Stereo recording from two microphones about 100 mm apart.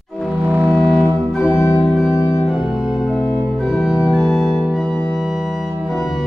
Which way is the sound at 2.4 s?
5° right (ahead or behind).